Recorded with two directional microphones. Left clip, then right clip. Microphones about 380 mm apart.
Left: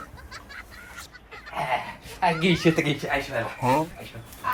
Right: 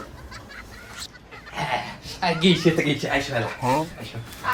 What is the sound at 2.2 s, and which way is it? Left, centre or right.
Speech, centre.